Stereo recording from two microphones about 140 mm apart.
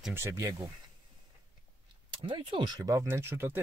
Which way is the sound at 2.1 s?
35° right (ahead or behind).